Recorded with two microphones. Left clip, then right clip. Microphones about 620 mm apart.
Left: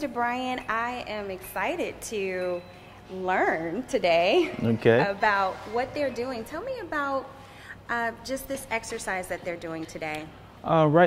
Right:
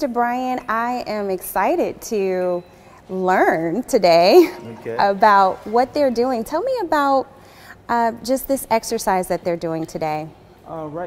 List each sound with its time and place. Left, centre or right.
0.0 s a woman's voice: right
4.9 s speech: right
6.2 s a woman's voice: right
8.3 s a woman's voice: right
10.7 s speech: left